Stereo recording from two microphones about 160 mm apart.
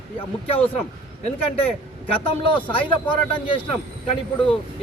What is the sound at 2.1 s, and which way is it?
Speech, 35° left (ahead or behind).